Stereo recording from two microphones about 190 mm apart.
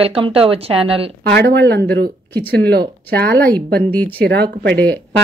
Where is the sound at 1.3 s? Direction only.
60° right (ahead or behind).